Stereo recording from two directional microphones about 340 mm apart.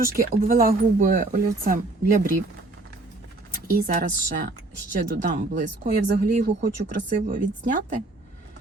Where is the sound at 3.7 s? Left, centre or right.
Right.